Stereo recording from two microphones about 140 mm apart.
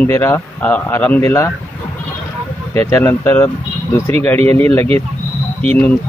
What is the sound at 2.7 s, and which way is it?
A man's voice, 15° left (ahead or behind).